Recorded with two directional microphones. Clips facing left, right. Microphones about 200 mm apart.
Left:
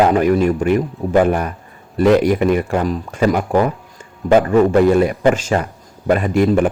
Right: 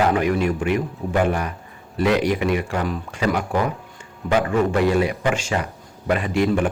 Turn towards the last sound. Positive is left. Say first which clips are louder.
# left 5 dB
turn(degrees=45)  # may be behind; listen again after turning